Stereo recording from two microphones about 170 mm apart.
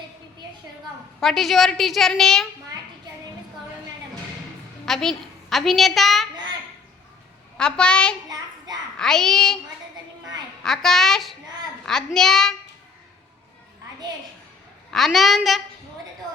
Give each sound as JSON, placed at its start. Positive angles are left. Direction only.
{"t": 1.2, "sound": "a woman's voice", "side_deg": 0}
{"t": 4.9, "sound": "a woman's voice", "side_deg": 0}
{"t": 7.6, "sound": "a woman's voice", "side_deg": 5}
{"t": 8.3, "sound": "a sound", "side_deg": -20}
{"t": 9.0, "sound": "a woman's voice", "side_deg": 5}
{"t": 10.6, "sound": "a woman's voice", "side_deg": 0}
{"t": 14.8, "sound": "a woman's voice", "side_deg": 0}